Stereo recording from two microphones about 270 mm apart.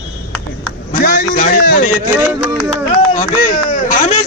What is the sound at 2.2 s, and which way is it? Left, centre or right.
Speech, centre.